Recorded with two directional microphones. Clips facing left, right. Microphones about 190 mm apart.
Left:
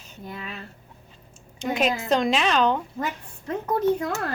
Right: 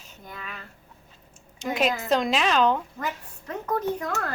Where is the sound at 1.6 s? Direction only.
Centre (ahead or behind).